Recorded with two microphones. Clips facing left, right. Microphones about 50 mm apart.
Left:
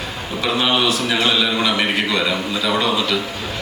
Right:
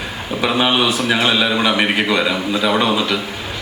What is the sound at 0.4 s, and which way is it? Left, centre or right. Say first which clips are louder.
A man's voice: right 2 dB; centre.